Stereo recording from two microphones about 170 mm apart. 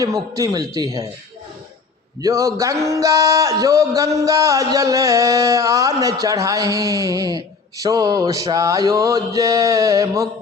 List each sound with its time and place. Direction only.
0.0 s music: 20° right (ahead or behind)
2.2 s music: 20° right (ahead or behind)